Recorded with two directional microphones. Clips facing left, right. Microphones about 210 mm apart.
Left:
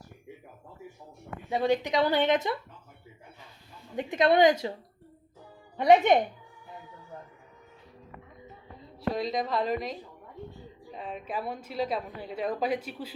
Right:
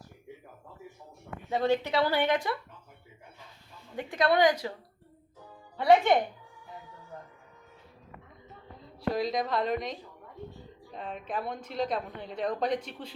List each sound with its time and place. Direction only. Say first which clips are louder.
1.5 s speech: left 1 dB; 15° left (ahead or behind)
3.9 s a woman's voice: left 3 dB; 20° left (ahead or behind)
5.7 s speech: left 2 dB; 20° left (ahead or behind)
8.8 s speech: right 1 dB; centre (ahead or behind)